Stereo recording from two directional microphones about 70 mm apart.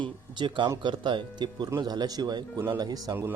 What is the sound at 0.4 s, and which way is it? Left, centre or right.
Speech, right.